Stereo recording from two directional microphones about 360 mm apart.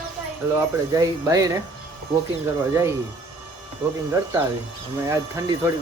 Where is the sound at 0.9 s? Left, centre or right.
Centre.